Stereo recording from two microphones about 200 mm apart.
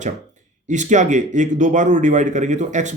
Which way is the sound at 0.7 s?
35° right (ahead or behind).